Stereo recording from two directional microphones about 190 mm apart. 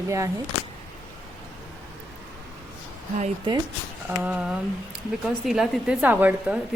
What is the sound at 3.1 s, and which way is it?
Speech, 35° right (ahead or behind).